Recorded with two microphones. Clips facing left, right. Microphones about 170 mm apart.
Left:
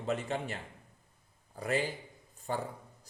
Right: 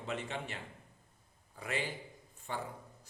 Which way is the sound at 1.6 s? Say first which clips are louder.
Left 6 dB; 40° left (ahead or behind).